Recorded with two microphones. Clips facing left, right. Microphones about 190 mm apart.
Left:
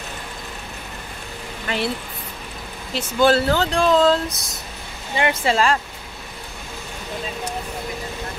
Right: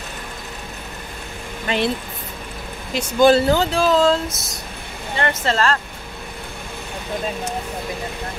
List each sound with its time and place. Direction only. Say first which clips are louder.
1.7 s speech: right 3 dB; 20° right (ahead or behind)
2.9 s speech: right 3 dB; 15° right (ahead or behind)
3.7 s speech: even; centre (ahead or behind)
5.1 s speech: left 1 dB; 10° left (ahead or behind)